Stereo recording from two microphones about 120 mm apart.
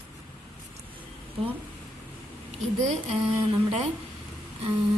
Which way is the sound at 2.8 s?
65° right (ahead or behind).